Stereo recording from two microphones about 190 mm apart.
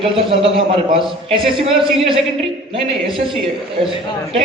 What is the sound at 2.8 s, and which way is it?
Speech, centre (ahead or behind).